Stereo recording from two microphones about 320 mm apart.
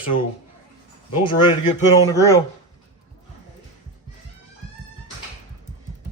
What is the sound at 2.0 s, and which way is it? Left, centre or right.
Speech, centre.